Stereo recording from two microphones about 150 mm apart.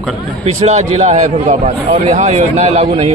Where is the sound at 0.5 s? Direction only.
45° right (ahead or behind).